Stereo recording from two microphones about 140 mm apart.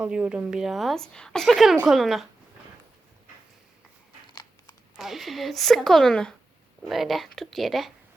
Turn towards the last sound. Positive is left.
turn(degrees=0)  # may be behind; listen again after turning